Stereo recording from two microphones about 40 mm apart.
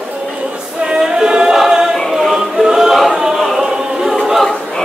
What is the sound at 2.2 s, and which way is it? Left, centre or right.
Choir, centre.